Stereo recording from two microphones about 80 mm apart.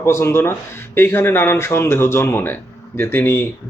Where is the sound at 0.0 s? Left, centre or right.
Left.